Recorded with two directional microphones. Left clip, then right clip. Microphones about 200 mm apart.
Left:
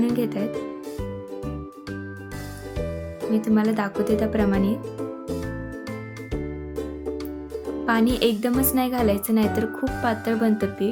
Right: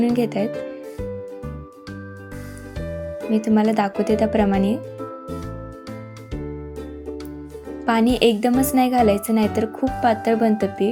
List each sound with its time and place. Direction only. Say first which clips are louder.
0.0 s speech: right 4 dB; 20° right (ahead or behind)
3.3 s a woman's voice: right 4 dB; 20° right (ahead or behind)
7.9 s a woman's voice: right 4 dB; 15° right (ahead or behind)